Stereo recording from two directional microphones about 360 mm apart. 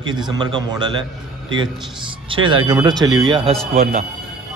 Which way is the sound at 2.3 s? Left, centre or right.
Centre.